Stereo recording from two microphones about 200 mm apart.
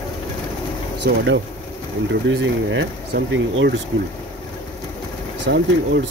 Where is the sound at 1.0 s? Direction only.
60° right (ahead or behind).